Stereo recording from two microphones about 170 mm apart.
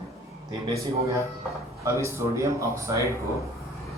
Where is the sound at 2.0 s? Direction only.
15° right (ahead or behind).